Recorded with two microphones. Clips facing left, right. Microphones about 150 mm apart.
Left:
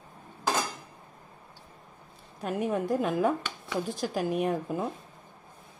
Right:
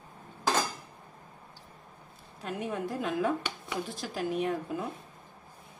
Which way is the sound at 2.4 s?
50° left (ahead or behind).